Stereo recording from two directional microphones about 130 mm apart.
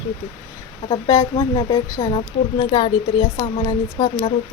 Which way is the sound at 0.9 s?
30° left (ahead or behind).